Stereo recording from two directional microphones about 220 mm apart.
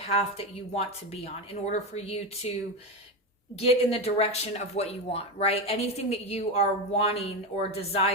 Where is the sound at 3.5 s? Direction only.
25° left (ahead or behind).